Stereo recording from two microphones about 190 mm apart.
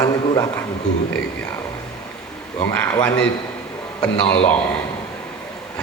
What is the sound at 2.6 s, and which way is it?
A man's voice, 10° left (ahead or behind).